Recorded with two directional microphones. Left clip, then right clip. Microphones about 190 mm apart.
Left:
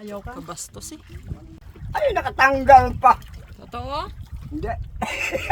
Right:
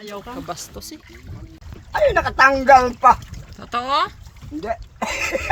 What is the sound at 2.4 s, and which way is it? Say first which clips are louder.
A woman's voice: even; 10° left (ahead or behind).